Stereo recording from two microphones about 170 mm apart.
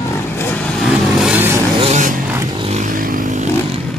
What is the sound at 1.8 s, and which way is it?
Vehicle, 45° right (ahead or behind).